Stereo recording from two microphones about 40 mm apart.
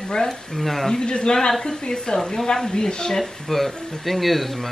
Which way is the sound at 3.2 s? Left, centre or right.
Centre.